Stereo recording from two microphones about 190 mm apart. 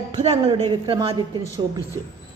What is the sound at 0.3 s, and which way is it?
Speech, 30° right (ahead or behind).